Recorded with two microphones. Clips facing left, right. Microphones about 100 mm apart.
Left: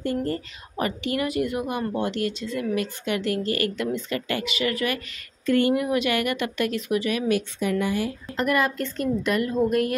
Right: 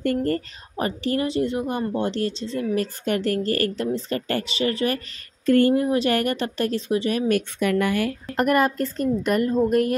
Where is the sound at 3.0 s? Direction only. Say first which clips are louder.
Right 3 dB; 45° right (ahead or behind).